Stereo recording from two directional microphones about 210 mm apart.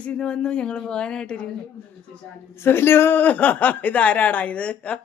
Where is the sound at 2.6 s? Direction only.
10° left (ahead or behind).